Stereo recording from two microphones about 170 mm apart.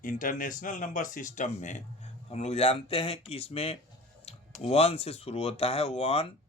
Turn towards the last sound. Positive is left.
turn(degrees=35)  # may be behind; listen again after turning